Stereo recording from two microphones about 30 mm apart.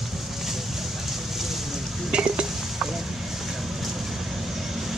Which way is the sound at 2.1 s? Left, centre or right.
Right.